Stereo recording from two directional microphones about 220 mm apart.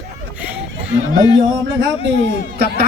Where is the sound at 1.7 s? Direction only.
55° right (ahead or behind).